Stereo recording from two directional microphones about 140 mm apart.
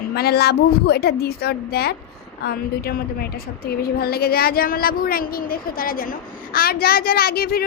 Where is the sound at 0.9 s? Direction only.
90° left.